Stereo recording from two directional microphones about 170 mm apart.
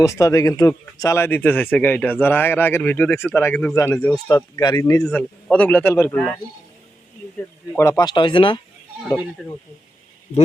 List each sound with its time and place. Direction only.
0.0 s speech: 20° left (ahead or behind)
4.3 s speech: 20° left (ahead or behind)
5.0 s speech: 10° left (ahead or behind)
7.8 s speech: 20° left (ahead or behind)